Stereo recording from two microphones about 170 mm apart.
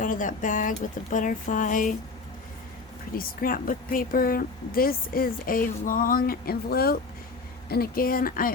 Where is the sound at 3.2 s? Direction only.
55° left (ahead or behind).